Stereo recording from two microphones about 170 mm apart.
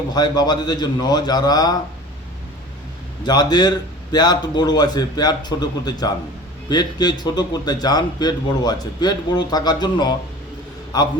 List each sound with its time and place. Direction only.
0.1 s a man's voice: 25° left (ahead or behind)
3.2 s a man's voice: 25° left (ahead or behind)